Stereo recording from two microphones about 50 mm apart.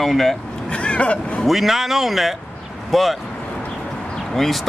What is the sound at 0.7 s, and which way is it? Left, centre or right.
Speech, left.